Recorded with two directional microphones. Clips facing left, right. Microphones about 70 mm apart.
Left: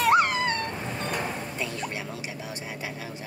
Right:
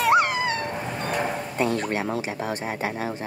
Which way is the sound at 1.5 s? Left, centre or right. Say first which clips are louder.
Right 8 dB; right.